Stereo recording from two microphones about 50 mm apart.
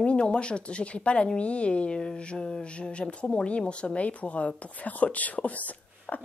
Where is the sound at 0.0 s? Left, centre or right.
Left.